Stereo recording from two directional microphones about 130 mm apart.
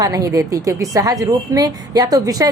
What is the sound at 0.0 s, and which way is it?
A woman's voice, 25° right (ahead or behind).